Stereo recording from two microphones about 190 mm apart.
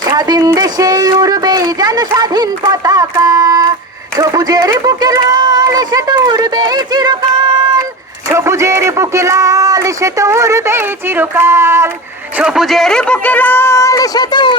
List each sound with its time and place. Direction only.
0.0 s speech: 20° right (ahead or behind)
4.2 s a sound: 20° right (ahead or behind)
8.3 s a man's voice: 15° right (ahead or behind); by 14.5 s 25° left (ahead or behind)